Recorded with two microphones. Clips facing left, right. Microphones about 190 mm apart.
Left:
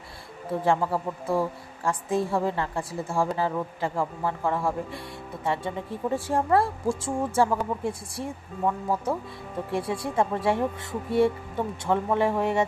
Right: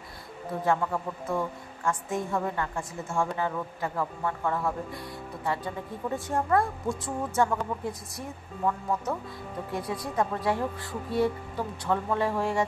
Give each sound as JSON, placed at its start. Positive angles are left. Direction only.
{"t": 0.6, "sound": "a woman's voice", "side_deg": 30}